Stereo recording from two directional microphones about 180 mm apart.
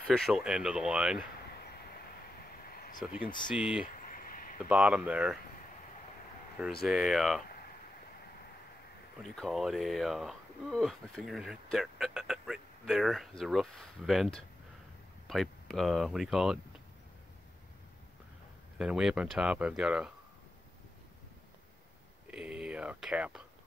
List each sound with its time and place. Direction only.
0.0 s speech: centre (ahead or behind)
1.6 s train: 60° left (ahead or behind)
2.7 s a sound: 55° left (ahead or behind)
3.5 s speech: 5° right (ahead or behind)
3.8 s a sound: 50° left (ahead or behind)
4.6 s speech: 5° right (ahead or behind)
6.8 s speech: centre (ahead or behind)
9.2 s speech: centre (ahead or behind)
18.8 s speech: 5° right (ahead or behind)
22.3 s speech: 5° right (ahead or behind)